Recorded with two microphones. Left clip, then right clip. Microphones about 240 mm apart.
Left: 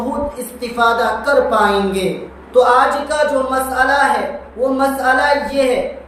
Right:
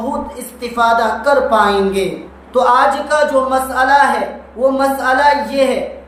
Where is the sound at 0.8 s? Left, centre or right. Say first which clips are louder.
Right 2 dB; centre.